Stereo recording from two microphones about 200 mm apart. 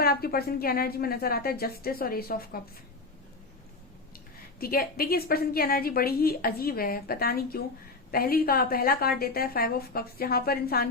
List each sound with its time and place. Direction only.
0.0 s a woman's voice: 50° left (ahead or behind)
4.6 s a woman's voice: 50° left (ahead or behind)